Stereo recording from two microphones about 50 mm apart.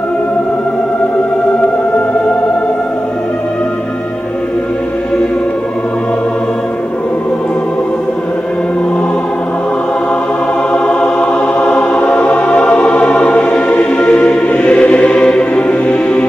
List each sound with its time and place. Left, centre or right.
10.7 s music: left